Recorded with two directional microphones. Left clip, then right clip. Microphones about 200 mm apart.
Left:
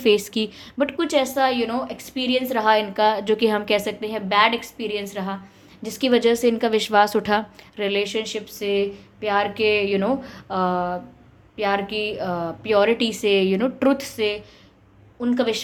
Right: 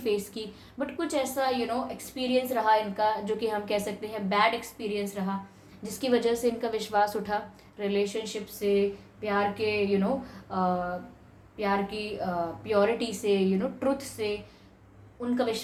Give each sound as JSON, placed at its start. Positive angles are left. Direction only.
{"t": 0.0, "sound": "a woman's voice", "side_deg": 40}